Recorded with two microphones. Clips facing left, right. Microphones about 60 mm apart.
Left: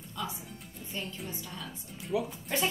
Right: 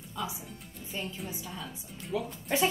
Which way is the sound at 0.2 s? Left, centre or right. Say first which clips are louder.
Right 1 dB; centre.